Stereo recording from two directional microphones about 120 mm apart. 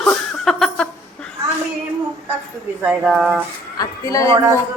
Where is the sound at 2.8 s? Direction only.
5° right (ahead or behind).